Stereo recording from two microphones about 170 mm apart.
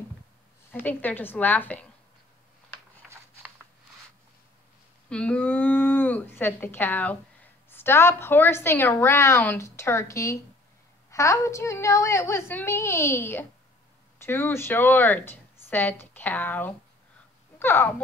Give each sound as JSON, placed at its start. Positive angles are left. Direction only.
{"t": 0.7, "sound": "a woman's voice", "side_deg": 10}
{"t": 5.1, "sound": "a woman's voice", "side_deg": 5}